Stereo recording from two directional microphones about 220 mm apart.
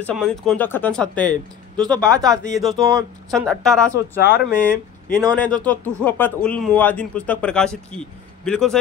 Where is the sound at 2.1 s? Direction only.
15° right (ahead or behind).